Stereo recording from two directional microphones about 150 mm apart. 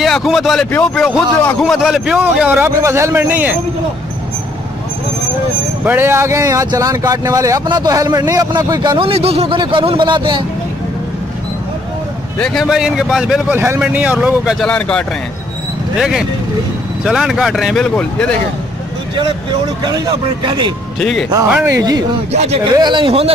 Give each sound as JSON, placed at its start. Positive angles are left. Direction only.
{"t": 0.0, "sound": "a man's voice", "side_deg": 0}
{"t": 5.9, "sound": "speech", "side_deg": -15}
{"t": 12.4, "sound": "a man's voice", "side_deg": 5}
{"t": 14.7, "sound": "a man's voice", "side_deg": 5}
{"t": 19.8, "sound": "speech", "side_deg": -30}
{"t": 21.0, "sound": "a man's voice", "side_deg": 0}
{"t": 21.6, "sound": "speech", "side_deg": -20}
{"t": 22.3, "sound": "speech", "side_deg": -45}
{"t": 22.7, "sound": "speech", "side_deg": -30}